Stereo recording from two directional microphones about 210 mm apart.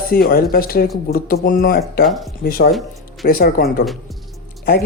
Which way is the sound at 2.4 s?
45° left (ahead or behind).